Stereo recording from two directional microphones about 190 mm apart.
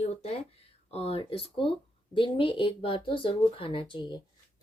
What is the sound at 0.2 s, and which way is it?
A woman's voice, 30° left (ahead or behind).